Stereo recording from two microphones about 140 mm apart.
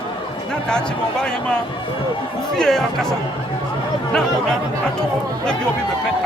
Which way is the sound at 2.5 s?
5° left (ahead or behind).